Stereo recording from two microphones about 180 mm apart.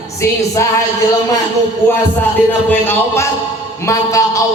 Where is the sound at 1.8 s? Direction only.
10° left (ahead or behind).